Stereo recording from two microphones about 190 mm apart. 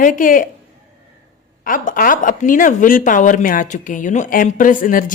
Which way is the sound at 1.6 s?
45° left (ahead or behind).